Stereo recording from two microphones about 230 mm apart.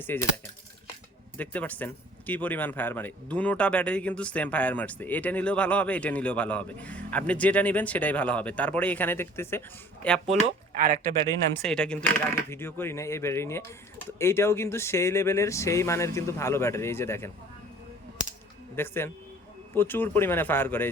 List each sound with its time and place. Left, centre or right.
0.0 s speech: centre
1.4 s speech: centre
10.2 s speech: right
11.6 s speech: centre
18.8 s speech: centre